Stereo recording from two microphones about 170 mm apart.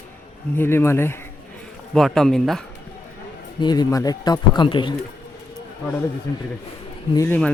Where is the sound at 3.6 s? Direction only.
25° left (ahead or behind).